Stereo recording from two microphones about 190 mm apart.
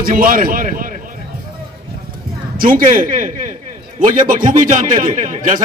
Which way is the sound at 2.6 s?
45° right (ahead or behind).